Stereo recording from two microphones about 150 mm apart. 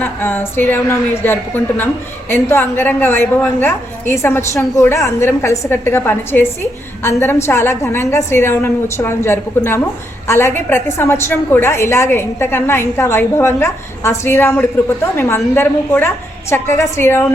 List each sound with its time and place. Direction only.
0.0 s a woman's voice: 15° left (ahead or behind)